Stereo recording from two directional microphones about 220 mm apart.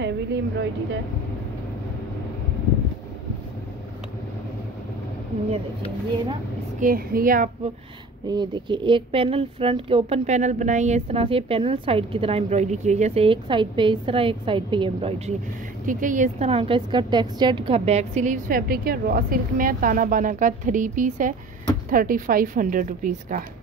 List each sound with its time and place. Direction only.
0.0 s speech: 50° right (ahead or behind)
6.8 s a woman's voice: 40° right (ahead or behind)
8.3 s speech: 20° right (ahead or behind)
15.8 s a woman's voice: 35° right (ahead or behind)